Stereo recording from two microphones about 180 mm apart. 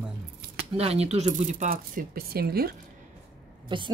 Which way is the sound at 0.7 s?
35° right (ahead or behind).